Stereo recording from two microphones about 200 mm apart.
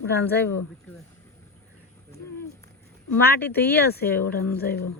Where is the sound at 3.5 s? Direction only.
55° left (ahead or behind).